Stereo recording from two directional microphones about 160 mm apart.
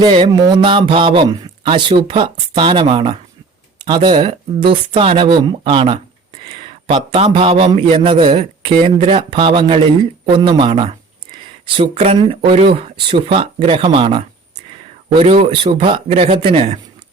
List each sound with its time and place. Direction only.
0.0 s a man's voice: 30° right (ahead or behind)
8.4 s a man's voice: 45° right (ahead or behind)